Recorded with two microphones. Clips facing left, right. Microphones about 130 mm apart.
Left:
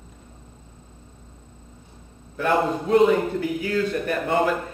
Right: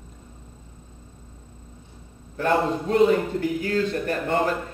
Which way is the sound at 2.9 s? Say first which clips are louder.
Left 2 dB; 40° right (ahead or behind).